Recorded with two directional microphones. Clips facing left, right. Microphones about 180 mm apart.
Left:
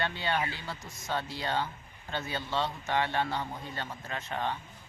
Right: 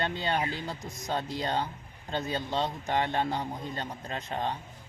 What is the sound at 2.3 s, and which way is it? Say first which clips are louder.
Speech: right 2 dB; 35° right (ahead or behind).